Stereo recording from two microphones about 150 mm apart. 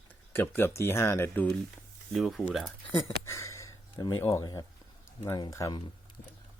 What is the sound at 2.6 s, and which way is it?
Speech, 20° left (ahead or behind).